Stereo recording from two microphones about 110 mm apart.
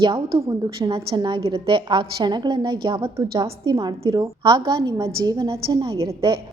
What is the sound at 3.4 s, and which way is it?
A woman's voice, 40° right (ahead or behind).